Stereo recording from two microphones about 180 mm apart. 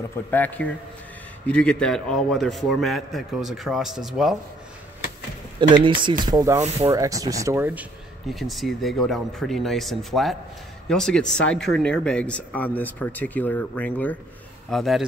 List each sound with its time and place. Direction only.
0.3 s a man's voice: 10° left (ahead or behind)
5.6 s speech: 25° right (ahead or behind); by 7.8 s 10° right (ahead or behind)
8.3 s a man's voice: centre (ahead or behind)